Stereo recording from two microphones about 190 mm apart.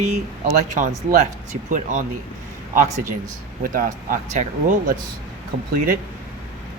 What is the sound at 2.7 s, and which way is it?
Speech, 35° right (ahead or behind).